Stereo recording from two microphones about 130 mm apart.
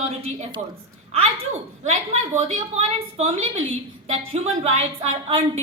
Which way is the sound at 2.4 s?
55° right (ahead or behind).